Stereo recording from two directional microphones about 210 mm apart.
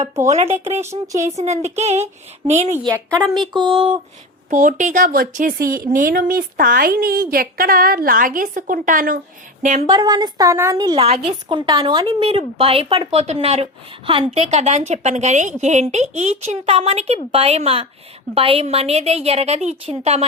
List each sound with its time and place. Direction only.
0.4 s speech: 10° right (ahead or behind)
1.4 s a woman's voice: 30° right (ahead or behind)
2.8 s speech: 15° right (ahead or behind)
3.2 s speech: centre (ahead or behind)
3.5 s a woman's voice: 25° right (ahead or behind)
4.4 s a woman's voice: 40° right (ahead or behind)
9.8 s a woman's voice: 20° right (ahead or behind)